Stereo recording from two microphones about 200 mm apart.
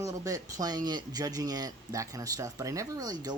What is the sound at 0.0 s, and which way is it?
Speech, 15° right (ahead or behind).